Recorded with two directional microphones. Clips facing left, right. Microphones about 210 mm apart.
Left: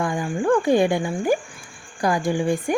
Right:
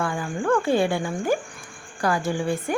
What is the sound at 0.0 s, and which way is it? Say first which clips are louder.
A woman's voice: left 3 dB; 15° left (ahead or behind).